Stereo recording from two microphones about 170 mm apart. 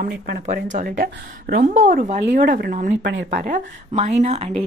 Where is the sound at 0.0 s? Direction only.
70° right (ahead or behind).